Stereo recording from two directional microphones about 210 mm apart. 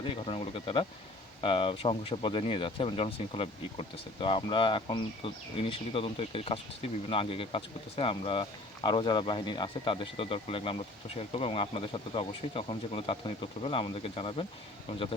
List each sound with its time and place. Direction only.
0.1 s speech: 25° left (ahead or behind)